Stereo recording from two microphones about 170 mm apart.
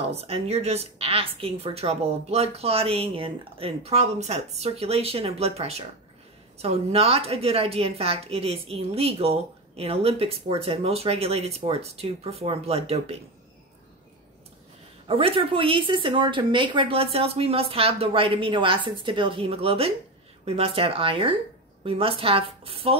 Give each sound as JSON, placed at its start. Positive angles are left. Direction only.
{"t": 0.1, "sound": "a woman's voice", "side_deg": -40}
{"t": 15.0, "sound": "a woman's voice", "side_deg": -35}